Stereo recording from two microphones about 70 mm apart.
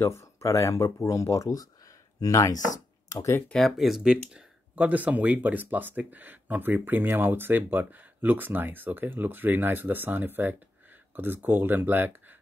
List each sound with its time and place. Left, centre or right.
0.0 s speech: left
3.5 s speech: centre
4.7 s speech: right